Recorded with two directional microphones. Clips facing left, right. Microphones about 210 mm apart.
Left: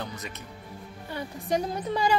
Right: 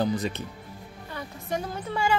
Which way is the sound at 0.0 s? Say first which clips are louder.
Right 11 dB; 30° right (ahead or behind).